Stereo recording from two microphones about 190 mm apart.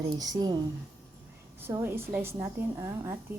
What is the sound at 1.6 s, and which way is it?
A woman's voice, 10° right (ahead or behind).